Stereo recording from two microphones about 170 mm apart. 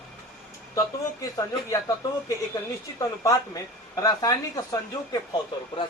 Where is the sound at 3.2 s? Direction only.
20° left (ahead or behind).